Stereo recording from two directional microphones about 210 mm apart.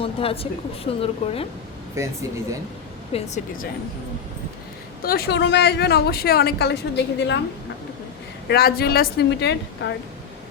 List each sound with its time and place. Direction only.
0.0 s a sound: 25° left (ahead or behind)
1.0 s speech: 30° left (ahead or behind)
2.0 s speech: 15° right (ahead or behind)
3.1 s speech: 30° left (ahead or behind)
5.0 s speech: 45° left (ahead or behind)
8.4 s speech: 50° left (ahead or behind)